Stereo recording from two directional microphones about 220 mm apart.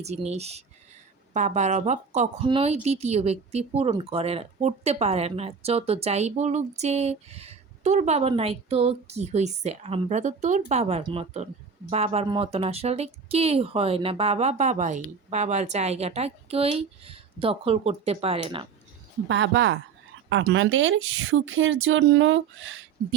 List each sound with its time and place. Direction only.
0.3 s a woman's voice: 30° right (ahead or behind)
19.3 s speech: 55° right (ahead or behind)